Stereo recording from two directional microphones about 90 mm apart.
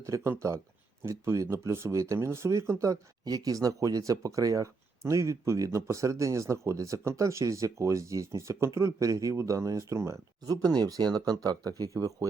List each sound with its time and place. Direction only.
0.0 s speech: 35° right (ahead or behind)
10.4 s speech: 45° right (ahead or behind)